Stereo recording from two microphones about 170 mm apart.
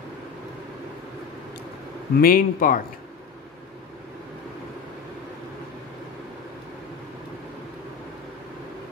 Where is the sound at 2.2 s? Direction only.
55° left (ahead or behind).